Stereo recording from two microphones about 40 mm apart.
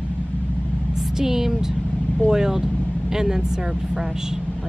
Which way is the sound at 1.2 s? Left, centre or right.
Centre.